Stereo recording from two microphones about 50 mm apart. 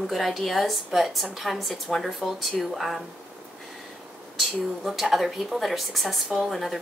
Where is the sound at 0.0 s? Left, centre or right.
Centre.